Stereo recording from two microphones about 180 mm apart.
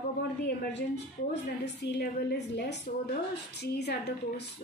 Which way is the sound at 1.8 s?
70° left (ahead or behind).